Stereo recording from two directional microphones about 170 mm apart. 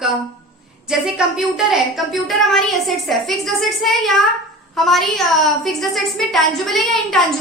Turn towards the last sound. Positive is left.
turn(degrees=0)  # may be behind; listen again after turning